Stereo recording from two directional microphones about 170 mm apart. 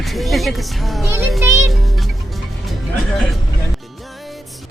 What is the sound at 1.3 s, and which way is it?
Speech, 15° right (ahead or behind).